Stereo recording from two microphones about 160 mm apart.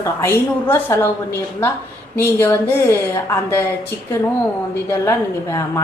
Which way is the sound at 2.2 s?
15° left (ahead or behind).